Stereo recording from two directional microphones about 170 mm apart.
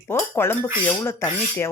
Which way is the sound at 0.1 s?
15° left (ahead or behind).